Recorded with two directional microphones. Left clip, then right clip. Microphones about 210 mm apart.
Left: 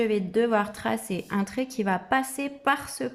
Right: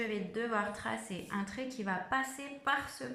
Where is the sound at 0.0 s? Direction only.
50° left (ahead or behind).